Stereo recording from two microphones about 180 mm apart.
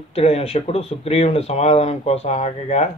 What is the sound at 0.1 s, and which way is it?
Speech, 35° left (ahead or behind).